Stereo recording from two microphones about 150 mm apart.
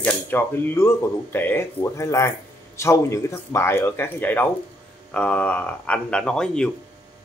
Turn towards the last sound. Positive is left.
turn(degrees=5)  # may be behind; listen again after turning